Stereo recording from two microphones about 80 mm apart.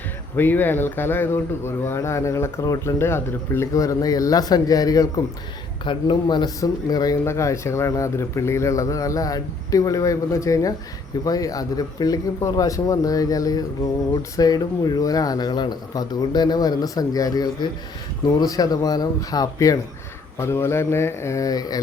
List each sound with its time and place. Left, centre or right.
0.3 s speech: left
3.8 s a man's voice: left
5.8 s speech: left
6.6 s a man's voice: left
7.3 s a man's voice: left
20.4 s speech: left